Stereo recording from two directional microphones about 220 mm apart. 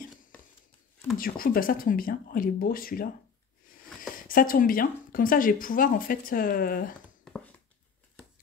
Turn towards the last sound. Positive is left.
turn(degrees=40)  # may be behind; listen again after turning